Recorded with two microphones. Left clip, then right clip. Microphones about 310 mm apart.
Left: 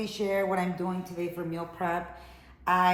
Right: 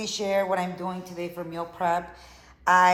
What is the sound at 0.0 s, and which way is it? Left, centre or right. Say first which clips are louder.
Speech: right 3 dB; right.